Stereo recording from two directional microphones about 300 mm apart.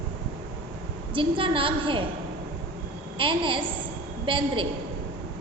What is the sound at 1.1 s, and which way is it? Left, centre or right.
Speech, centre.